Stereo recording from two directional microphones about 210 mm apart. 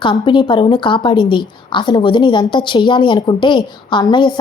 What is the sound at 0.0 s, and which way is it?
A woman's voice, 20° left (ahead or behind).